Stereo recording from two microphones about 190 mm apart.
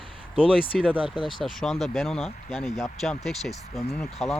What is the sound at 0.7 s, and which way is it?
Speech, 5° right (ahead or behind).